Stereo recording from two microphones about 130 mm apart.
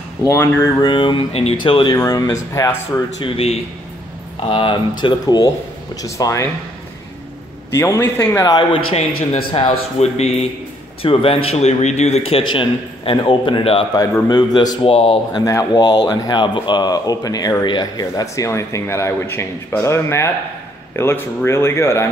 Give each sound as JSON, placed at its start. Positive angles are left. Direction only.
{"t": 0.2, "sound": "speech", "side_deg": 20}
{"t": 0.8, "sound": "a man's voice", "side_deg": 40}
{"t": 1.6, "sound": "speech", "side_deg": 40}
{"t": 2.0, "sound": "speech", "side_deg": 25}
{"t": 3.3, "sound": "a man's voice", "side_deg": 50}
{"t": 7.7, "sound": "speech", "side_deg": 20}
{"t": 8.5, "sound": "speech", "side_deg": 40}
{"t": 9.9, "sound": "a man's voice", "side_deg": 55}
{"t": 14.9, "sound": "a man's voice", "side_deg": 50}
{"t": 15.3, "sound": "speech", "side_deg": 30}